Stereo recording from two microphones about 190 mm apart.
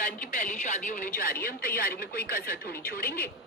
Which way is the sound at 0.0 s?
45° left (ahead or behind).